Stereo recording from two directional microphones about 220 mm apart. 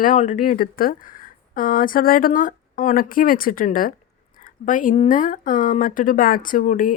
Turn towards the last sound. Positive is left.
turn(degrees=35)  # may be behind; listen again after turning